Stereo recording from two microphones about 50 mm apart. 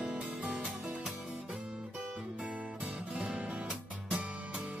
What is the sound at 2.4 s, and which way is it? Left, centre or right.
Music, right.